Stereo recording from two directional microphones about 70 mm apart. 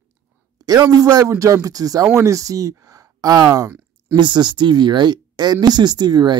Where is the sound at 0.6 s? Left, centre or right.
Right.